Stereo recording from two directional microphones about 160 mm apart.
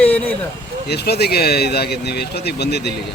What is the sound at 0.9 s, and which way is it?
Speech, 90° left.